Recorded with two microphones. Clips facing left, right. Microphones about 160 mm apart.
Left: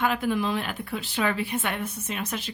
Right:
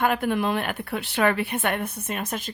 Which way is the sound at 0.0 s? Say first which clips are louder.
Right 2 dB; 55° right (ahead or behind).